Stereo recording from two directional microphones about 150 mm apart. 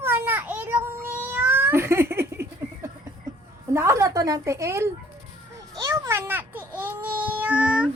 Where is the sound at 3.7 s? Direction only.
20° right (ahead or behind).